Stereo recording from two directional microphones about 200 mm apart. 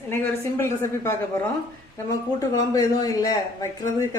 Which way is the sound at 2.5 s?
15° left (ahead or behind).